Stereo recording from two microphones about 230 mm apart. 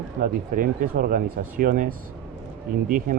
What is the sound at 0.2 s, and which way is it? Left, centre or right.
Speech, right.